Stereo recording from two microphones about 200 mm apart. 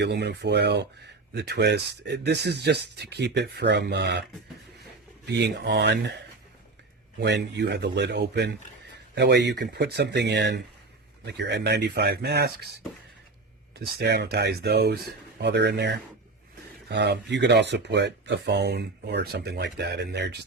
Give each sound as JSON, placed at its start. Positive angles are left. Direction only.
{"t": 0.0, "sound": "speech", "side_deg": -60}
{"t": 5.2, "sound": "speech", "side_deg": -60}
{"t": 7.2, "sound": "speech", "side_deg": -60}
{"t": 13.7, "sound": "speech", "side_deg": -55}